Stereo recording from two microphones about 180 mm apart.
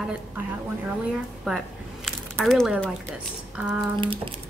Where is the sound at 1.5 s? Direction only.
Centre (ahead or behind).